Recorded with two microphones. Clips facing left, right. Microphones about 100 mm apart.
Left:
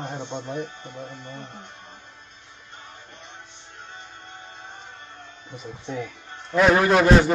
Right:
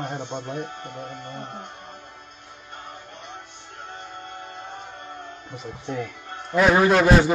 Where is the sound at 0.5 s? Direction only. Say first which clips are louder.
Even; 55° right (ahead or behind).